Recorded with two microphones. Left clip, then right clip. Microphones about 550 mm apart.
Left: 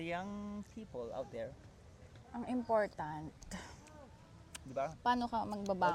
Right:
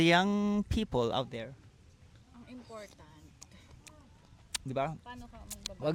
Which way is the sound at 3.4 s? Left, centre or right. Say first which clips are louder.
Left 5 dB; right.